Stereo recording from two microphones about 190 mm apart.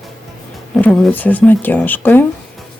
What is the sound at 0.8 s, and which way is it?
Speech, 10° left (ahead or behind).